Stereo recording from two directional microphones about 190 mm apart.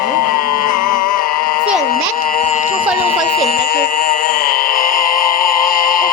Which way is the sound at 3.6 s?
50° left (ahead or behind).